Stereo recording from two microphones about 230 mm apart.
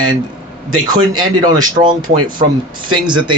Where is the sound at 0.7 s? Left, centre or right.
Centre.